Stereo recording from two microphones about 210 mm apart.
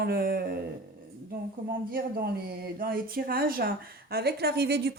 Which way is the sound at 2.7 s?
45° right (ahead or behind).